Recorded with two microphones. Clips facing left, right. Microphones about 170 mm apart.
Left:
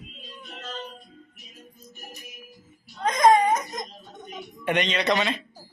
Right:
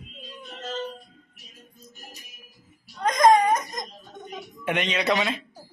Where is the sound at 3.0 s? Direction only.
5° left (ahead or behind).